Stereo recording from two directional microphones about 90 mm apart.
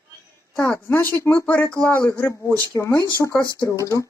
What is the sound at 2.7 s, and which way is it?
Speech, 45° left (ahead or behind).